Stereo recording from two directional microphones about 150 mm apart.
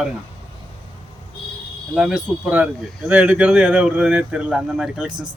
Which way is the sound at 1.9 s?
5° right (ahead or behind).